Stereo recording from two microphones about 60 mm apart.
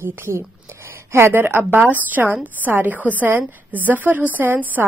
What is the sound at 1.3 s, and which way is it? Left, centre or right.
A woman's voice, right.